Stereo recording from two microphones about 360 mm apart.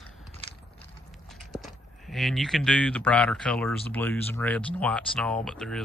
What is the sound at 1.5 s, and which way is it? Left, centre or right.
Speech, centre.